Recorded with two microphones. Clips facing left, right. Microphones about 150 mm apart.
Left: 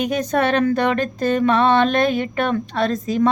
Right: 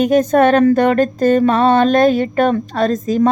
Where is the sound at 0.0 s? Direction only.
45° right (ahead or behind).